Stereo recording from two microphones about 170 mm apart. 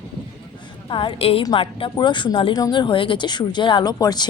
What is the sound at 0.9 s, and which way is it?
Speech, 30° left (ahead or behind).